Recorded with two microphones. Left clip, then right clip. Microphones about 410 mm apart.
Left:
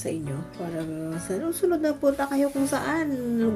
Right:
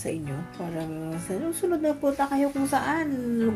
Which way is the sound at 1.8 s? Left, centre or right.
Left.